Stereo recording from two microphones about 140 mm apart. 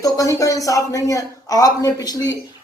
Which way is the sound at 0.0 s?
25° left (ahead or behind).